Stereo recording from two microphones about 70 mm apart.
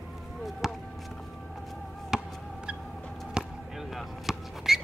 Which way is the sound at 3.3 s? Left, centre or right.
Centre.